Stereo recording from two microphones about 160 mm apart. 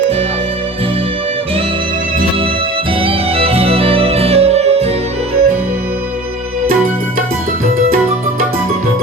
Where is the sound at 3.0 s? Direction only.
35° right (ahead or behind).